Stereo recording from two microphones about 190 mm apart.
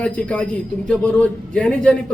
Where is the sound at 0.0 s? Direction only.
5° left (ahead or behind).